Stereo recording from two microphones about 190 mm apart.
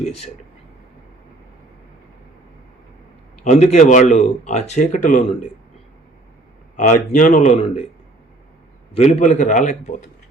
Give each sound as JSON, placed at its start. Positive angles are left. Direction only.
{"t": 3.4, "sound": "speech", "side_deg": 40}
{"t": 6.7, "sound": "speech", "side_deg": 40}
{"t": 8.9, "sound": "speech", "side_deg": 35}